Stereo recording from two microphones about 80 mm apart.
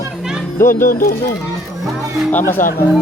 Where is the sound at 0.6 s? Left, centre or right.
Left.